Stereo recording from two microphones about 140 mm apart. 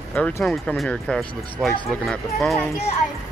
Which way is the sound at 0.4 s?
Centre (ahead or behind).